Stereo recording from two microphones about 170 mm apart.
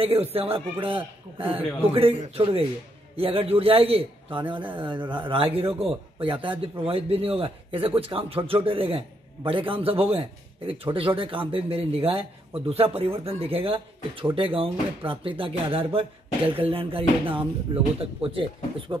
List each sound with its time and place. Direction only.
0.0 s a man's voice: 35° right (ahead or behind)